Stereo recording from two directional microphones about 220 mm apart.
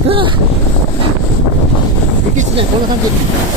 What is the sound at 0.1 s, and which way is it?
Boat, 25° right (ahead or behind).